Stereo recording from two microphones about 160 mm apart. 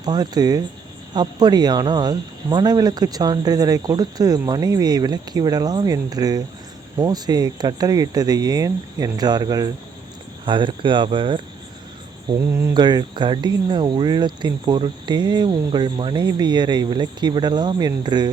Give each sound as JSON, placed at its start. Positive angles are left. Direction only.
{"t": 0.0, "sound": "speech", "side_deg": -25}
{"t": 12.5, "sound": "a sound", "side_deg": -15}
{"t": 12.7, "sound": "speech", "side_deg": -25}